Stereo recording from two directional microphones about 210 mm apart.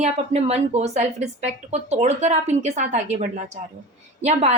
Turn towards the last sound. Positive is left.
turn(degrees=-30)  # may be behind; listen again after turning